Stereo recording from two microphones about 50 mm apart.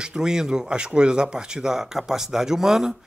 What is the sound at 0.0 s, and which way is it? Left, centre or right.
A man's voice, centre.